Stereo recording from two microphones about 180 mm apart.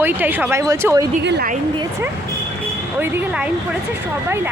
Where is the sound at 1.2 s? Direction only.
65° right (ahead or behind).